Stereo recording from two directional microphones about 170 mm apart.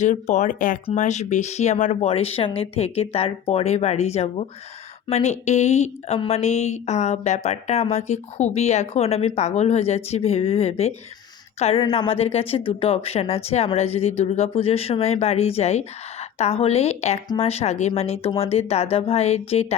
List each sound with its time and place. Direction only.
0.0 s speech: 45° left (ahead or behind)